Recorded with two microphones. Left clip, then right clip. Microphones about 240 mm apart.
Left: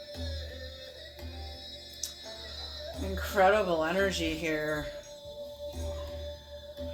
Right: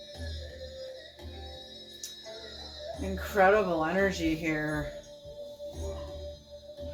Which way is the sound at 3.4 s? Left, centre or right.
Left.